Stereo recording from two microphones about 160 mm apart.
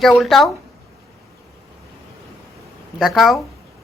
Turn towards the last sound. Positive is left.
turn(degrees=0)  # may be behind; listen again after turning